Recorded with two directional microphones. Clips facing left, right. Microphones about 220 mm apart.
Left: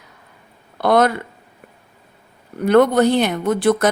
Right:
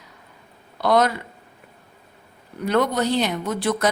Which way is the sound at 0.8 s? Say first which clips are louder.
Left 4 dB; 55° left (ahead or behind).